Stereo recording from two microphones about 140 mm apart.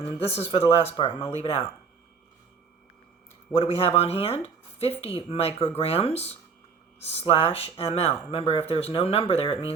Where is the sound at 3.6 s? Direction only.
45° left (ahead or behind).